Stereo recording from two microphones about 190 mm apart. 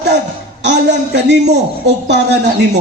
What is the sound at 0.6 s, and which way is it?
Speech, 65° right (ahead or behind).